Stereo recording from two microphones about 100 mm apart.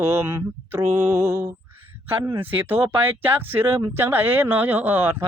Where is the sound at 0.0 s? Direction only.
25° right (ahead or behind).